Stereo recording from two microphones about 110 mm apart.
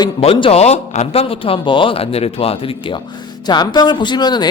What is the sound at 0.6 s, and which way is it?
A man's voice, 80° left.